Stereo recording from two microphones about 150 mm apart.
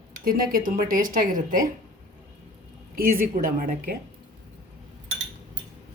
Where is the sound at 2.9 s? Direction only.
75° right (ahead or behind).